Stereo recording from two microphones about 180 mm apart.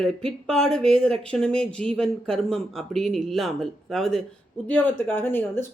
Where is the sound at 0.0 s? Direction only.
Centre (ahead or behind).